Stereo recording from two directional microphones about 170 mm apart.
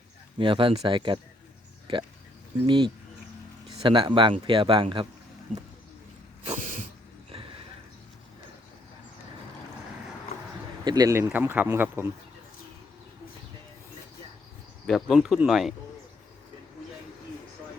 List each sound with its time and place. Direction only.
0.3 s speech: 30° right (ahead or behind)
2.6 s speech: 30° right (ahead or behind)
6.4 s cough: 45° right (ahead or behind)
10.8 s speech: 20° right (ahead or behind)
14.8 s speech: centre (ahead or behind)